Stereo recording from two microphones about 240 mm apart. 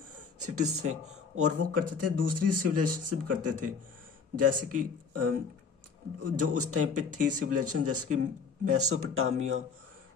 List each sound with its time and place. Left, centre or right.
0.1 s speech: right